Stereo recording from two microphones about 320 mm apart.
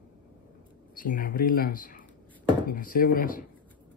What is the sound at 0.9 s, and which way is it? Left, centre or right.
Speech, left.